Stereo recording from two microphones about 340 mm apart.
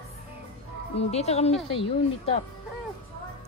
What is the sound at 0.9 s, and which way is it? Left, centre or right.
A woman's voice, centre.